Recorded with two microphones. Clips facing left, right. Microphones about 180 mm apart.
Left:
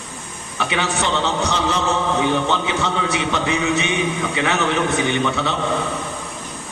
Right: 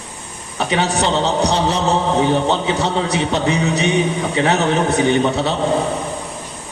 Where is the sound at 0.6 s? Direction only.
35° right (ahead or behind).